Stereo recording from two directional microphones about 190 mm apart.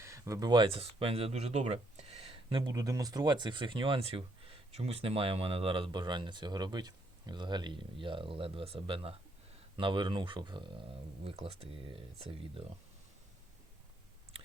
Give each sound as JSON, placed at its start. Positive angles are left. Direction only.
{"t": 0.0, "sound": "speech", "side_deg": -15}